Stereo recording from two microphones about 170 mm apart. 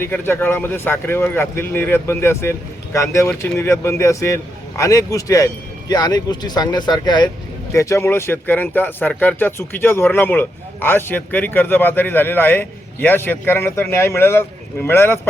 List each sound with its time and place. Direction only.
0.0 s speech: 15° left (ahead or behind)